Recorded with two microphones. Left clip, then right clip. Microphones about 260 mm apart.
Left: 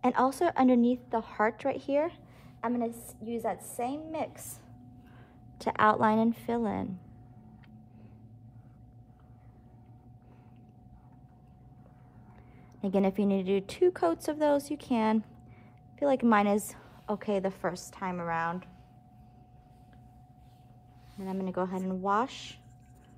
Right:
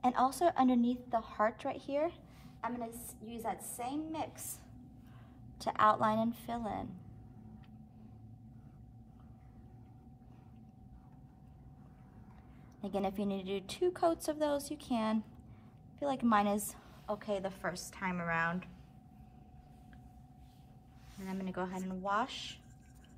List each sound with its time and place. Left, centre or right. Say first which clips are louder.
0.0 s a woman's voice: left 3 dB; left
5.6 s a woman's voice: left 4 dB; left
12.8 s a woman's voice: left 8 dB; left; by 18.7 s centre
21.2 s speech: left 7 dB; centre